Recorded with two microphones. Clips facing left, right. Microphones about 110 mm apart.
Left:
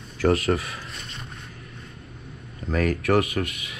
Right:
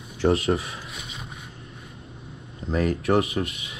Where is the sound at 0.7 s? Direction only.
5° right (ahead or behind).